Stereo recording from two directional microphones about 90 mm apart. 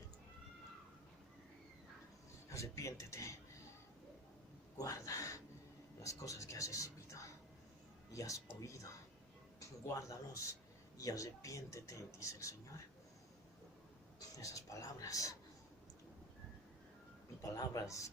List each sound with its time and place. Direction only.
2.5 s speech: 35° left (ahead or behind)
4.8 s a sound: 35° left (ahead or behind)
6.0 s speech: 40° left (ahead or behind)
14.3 s speech: 40° left (ahead or behind)
17.4 s speech: 40° left (ahead or behind)